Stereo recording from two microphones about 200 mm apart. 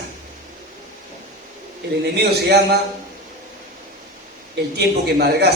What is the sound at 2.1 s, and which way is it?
Speech, 55° right (ahead or behind).